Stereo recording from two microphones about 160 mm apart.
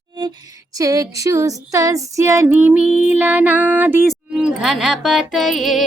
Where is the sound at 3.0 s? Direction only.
10° right (ahead or behind).